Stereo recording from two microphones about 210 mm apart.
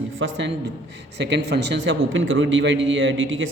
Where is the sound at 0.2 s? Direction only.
60° right (ahead or behind).